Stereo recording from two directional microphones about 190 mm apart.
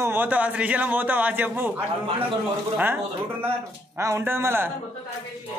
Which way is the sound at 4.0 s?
15° right (ahead or behind).